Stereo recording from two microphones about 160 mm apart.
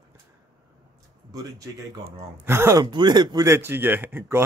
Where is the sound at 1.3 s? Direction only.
20° right (ahead or behind).